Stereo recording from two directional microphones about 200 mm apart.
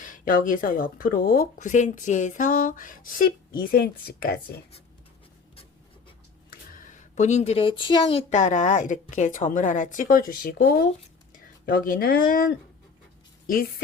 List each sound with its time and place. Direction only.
0.0 s speech: 40° left (ahead or behind)
6.5 s speech: 45° left (ahead or behind)
13.5 s speech: 45° left (ahead or behind)